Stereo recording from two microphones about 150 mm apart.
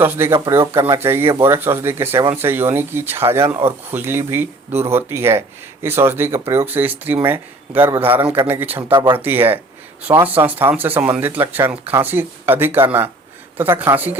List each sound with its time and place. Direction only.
0.0 s speech: 15° right (ahead or behind)